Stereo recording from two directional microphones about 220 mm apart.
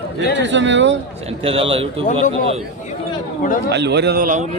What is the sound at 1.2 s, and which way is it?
Speech, 25° right (ahead or behind).